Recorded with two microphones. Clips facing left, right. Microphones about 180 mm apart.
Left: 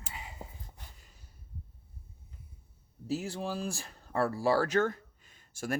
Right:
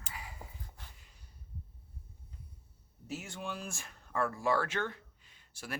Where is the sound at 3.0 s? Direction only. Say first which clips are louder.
Left 7 dB; 35° left (ahead or behind).